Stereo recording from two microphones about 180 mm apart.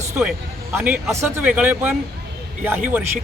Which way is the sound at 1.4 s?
10° right (ahead or behind).